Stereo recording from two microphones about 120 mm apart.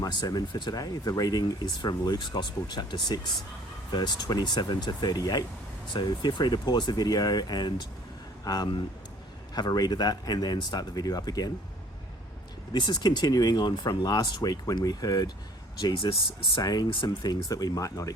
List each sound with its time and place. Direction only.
0.0 s speech: 35° left (ahead or behind)
12.7 s speech: 35° left (ahead or behind)